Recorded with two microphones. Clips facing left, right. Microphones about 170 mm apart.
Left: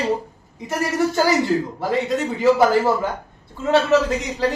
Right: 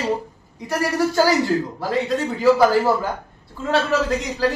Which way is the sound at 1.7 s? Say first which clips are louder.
Left 1 dB; 20° left (ahead or behind).